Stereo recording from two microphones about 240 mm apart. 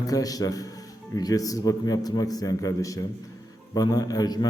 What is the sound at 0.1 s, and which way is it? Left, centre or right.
A man's voice, centre.